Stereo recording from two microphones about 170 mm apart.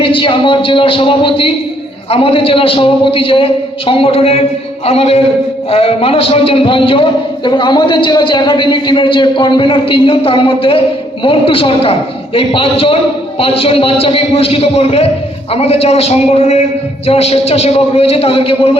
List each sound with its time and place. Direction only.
0.0 s a man's voice: 30° left (ahead or behind)